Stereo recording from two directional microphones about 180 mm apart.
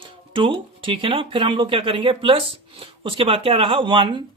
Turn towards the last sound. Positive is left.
turn(degrees=-25)  # may be behind; listen again after turning